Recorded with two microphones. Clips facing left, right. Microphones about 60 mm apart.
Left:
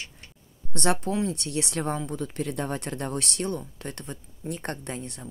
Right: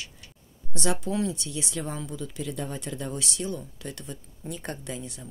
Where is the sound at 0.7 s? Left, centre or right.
Left.